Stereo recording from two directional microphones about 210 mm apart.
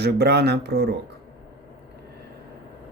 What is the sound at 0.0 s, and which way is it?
Speech, 50° right (ahead or behind).